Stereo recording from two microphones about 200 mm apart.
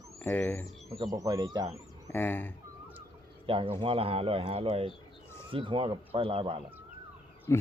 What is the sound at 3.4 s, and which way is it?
Speech, 25° right (ahead or behind).